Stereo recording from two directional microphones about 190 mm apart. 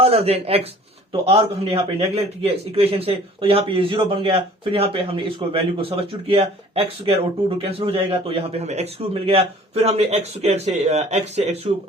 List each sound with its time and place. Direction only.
0.0 s a man's voice: 30° right (ahead or behind)